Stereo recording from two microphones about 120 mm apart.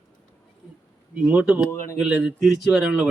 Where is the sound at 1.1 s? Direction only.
10° right (ahead or behind).